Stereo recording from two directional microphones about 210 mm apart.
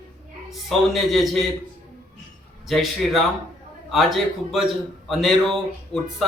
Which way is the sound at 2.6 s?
Centre (ahead or behind).